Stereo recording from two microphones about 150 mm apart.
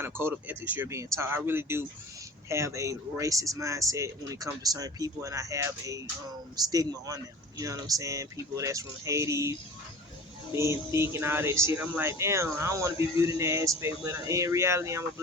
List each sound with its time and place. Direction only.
0.0 s speech: 15° right (ahead or behind)